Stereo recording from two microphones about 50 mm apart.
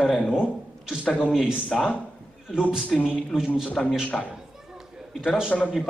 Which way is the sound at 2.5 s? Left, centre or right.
Centre.